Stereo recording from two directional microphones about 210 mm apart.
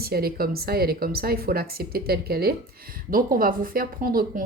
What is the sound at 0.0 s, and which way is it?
Speech, 45° right (ahead or behind).